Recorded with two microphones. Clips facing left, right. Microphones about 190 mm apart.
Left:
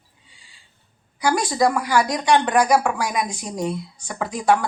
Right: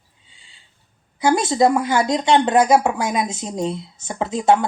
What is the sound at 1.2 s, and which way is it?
Speech, 25° right (ahead or behind).